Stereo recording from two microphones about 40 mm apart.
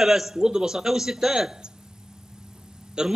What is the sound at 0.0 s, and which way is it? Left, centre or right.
A man's voice, centre.